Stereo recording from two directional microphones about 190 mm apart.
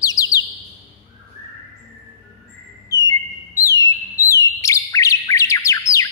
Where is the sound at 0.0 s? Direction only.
20° left (ahead or behind).